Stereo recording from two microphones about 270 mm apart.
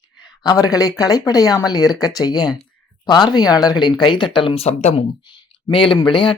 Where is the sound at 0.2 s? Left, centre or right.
Centre.